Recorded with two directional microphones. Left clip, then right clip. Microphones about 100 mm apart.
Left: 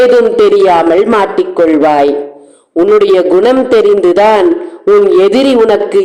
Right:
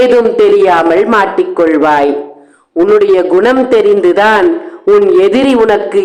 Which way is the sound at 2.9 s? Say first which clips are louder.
Left 1 dB; 30° left (ahead or behind).